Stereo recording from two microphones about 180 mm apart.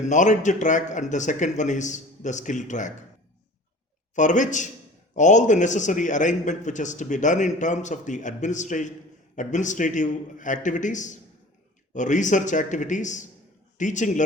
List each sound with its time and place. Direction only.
0.1 s a man's voice: 45° left (ahead or behind)
4.1 s a man's voice: 45° left (ahead or behind)